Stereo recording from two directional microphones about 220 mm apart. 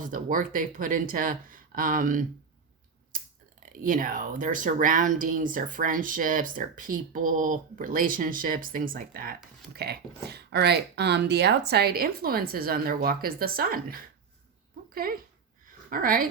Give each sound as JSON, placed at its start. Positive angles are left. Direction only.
{"t": 0.0, "sound": "speech", "side_deg": -35}
{"t": 3.7, "sound": "speech", "side_deg": -40}